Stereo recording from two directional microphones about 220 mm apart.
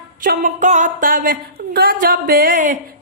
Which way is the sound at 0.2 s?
40° right (ahead or behind).